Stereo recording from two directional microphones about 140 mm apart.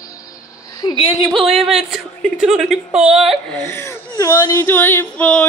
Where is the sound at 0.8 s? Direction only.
40° left (ahead or behind).